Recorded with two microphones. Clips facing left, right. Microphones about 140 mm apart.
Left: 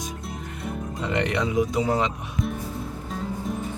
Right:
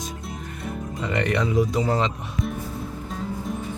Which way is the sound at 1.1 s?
20° left (ahead or behind).